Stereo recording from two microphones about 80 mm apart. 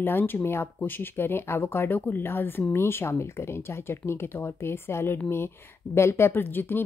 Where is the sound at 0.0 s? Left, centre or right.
Left.